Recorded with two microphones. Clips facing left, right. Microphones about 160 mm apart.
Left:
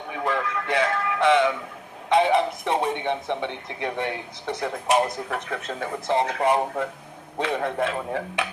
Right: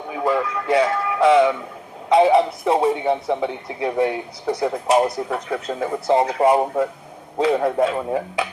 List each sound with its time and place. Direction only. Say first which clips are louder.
0.1 s music: right 5 dB; 30° right (ahead or behind)
2.1 s speech: right 5 dB; 30° right (ahead or behind)